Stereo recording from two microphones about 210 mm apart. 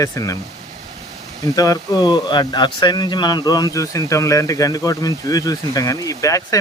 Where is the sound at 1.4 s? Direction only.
15° left (ahead or behind).